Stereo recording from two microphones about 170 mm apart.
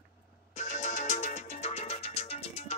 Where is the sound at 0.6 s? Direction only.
45° left (ahead or behind).